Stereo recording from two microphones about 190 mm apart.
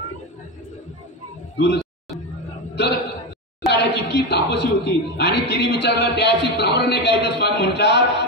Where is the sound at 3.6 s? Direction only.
60° left (ahead or behind).